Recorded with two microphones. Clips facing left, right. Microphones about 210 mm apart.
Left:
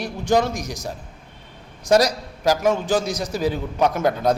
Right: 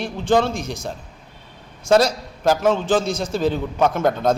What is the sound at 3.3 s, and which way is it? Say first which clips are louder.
Speech: right 2 dB; 10° left (ahead or behind).